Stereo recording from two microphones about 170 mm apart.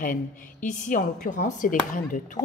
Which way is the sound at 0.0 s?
50° left (ahead or behind).